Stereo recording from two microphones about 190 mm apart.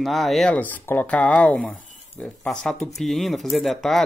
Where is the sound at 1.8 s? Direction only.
40° left (ahead or behind).